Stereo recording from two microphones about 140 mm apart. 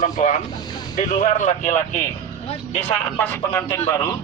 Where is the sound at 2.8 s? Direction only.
10° left (ahead or behind).